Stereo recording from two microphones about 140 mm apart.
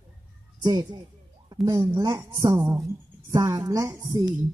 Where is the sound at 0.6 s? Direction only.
30° right (ahead or behind).